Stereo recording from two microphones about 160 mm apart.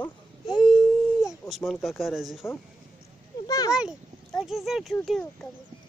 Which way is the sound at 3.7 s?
5° right (ahead or behind).